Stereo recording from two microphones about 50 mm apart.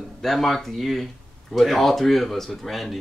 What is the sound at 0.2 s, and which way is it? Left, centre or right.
Speech, centre.